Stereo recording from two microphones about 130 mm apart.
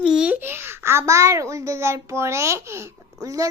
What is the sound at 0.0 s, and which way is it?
A child's voice, 5° right (ahead or behind).